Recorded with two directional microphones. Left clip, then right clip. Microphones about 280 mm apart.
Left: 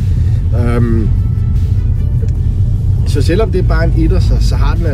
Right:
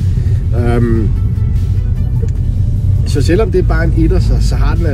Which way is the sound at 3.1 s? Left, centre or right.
Centre.